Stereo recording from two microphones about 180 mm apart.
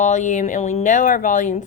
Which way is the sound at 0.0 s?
40° left (ahead or behind).